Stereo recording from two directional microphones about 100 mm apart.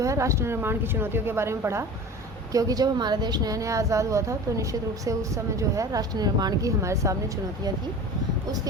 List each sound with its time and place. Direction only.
0.0 s a woman's voice: 30° right (ahead or behind)